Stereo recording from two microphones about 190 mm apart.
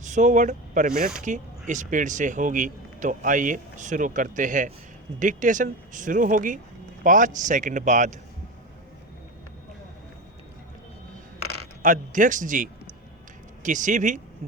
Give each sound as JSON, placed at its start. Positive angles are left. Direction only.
{"t": 0.0, "sound": "speech", "side_deg": -40}
{"t": 11.8, "sound": "speech", "side_deg": -40}